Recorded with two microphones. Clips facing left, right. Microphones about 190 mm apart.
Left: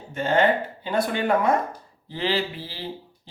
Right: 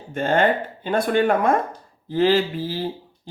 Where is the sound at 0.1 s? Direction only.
50° right (ahead or behind).